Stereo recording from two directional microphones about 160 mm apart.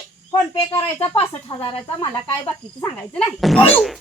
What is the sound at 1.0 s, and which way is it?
Speech, 35° left (ahead or behind).